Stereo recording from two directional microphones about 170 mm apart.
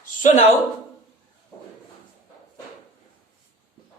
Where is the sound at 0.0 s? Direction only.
50° left (ahead or behind).